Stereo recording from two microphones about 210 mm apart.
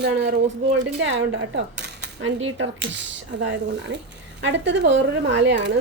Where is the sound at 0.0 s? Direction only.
50° right (ahead or behind).